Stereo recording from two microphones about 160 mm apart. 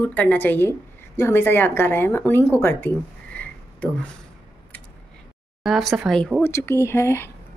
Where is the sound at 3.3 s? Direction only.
10° left (ahead or behind).